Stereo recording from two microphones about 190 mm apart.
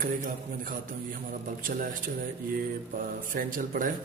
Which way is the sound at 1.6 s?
45° right (ahead or behind).